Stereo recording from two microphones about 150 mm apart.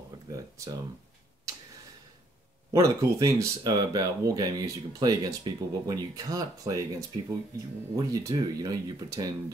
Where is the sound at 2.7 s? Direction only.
20° right (ahead or behind).